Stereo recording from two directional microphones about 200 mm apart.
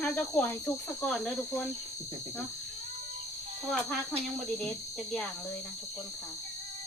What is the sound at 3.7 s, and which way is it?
Speech, 5° left (ahead or behind).